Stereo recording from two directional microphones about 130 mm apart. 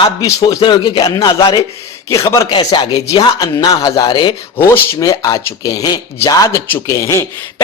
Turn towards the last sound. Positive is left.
turn(degrees=20)  # may be behind; listen again after turning